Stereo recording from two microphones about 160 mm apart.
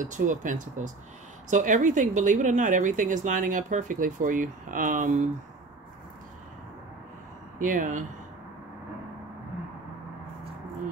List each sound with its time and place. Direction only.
0.0 s a woman's voice: 50° right (ahead or behind)
7.5 s speech: 55° right (ahead or behind)